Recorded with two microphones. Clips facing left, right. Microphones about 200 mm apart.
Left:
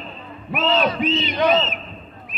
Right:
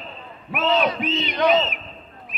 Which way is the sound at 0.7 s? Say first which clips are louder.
Left 1 dB; 20° right (ahead or behind).